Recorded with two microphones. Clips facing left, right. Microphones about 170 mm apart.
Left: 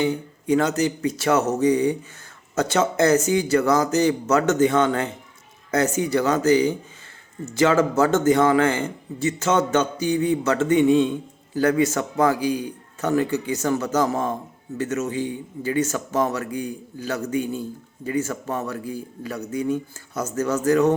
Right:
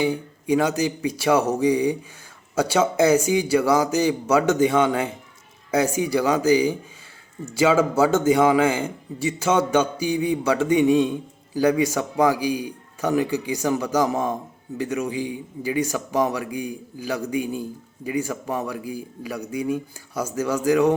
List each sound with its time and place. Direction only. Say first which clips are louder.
0.0 s a man's voice: even; 10° right (ahead or behind)